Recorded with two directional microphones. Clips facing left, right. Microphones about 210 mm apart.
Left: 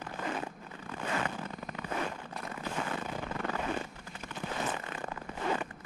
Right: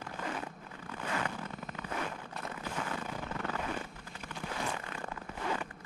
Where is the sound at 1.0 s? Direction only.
25° left (ahead or behind).